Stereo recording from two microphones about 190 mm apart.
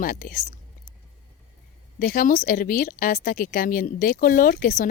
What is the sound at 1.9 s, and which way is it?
Speech, 45° left (ahead or behind).